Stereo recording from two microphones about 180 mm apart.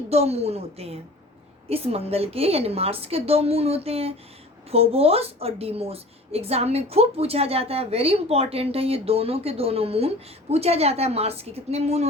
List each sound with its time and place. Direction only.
0.1 s a woman's voice: 35° right (ahead or behind)